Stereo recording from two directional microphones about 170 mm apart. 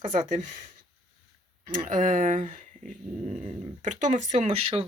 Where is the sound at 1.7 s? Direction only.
50° right (ahead or behind).